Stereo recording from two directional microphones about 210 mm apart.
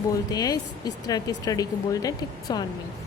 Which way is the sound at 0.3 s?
20° left (ahead or behind).